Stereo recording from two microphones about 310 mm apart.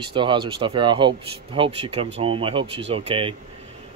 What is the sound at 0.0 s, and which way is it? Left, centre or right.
Speech, centre.